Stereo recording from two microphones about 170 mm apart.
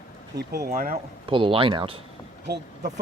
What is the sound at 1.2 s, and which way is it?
Speech, 30° right (ahead or behind).